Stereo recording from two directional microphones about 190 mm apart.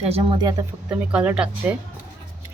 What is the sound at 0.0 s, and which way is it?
Speech, 30° right (ahead or behind).